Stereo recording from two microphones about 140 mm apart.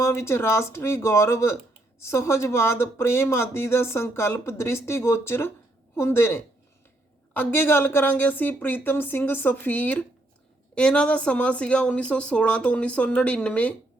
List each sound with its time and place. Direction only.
0.0 s speech: 20° left (ahead or behind)